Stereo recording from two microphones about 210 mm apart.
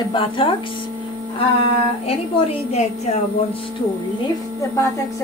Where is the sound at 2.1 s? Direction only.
30° left (ahead or behind).